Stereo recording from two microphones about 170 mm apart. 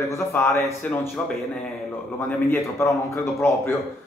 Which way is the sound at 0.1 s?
15° left (ahead or behind).